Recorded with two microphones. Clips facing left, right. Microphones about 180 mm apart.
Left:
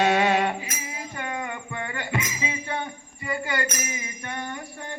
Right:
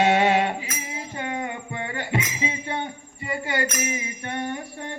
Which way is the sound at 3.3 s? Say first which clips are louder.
Right 1 dB; 25° right (ahead or behind).